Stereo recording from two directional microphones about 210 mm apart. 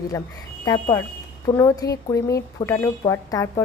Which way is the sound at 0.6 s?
15° left (ahead or behind).